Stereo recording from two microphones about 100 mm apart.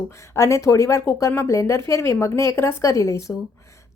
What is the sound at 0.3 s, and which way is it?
A woman's voice, 30° left (ahead or behind).